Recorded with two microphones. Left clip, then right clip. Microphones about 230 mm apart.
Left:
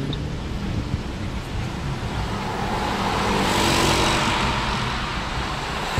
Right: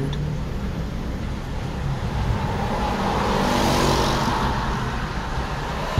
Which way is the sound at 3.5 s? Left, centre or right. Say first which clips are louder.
Left 2 dB; left.